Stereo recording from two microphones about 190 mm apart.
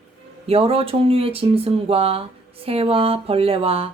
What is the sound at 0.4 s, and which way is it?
Speech, 30° right (ahead or behind).